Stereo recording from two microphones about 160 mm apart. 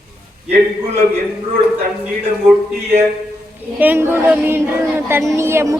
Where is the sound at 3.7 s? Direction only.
10° right (ahead or behind).